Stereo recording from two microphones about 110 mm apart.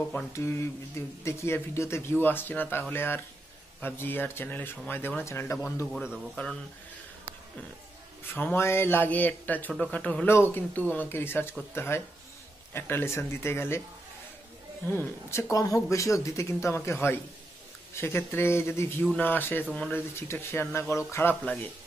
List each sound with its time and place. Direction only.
0.3 s speech: 25° left (ahead or behind)
6.3 s speech: 5° left (ahead or behind)
8.5 s speech: 20° left (ahead or behind)
14.9 s speech: 15° left (ahead or behind)
15.5 s speech: 30° left (ahead or behind)